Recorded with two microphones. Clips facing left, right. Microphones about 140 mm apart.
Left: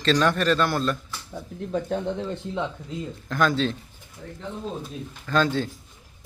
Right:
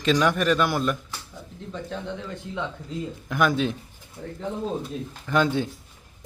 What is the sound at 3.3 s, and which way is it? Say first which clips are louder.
Speech: even; 15° right (ahead or behind).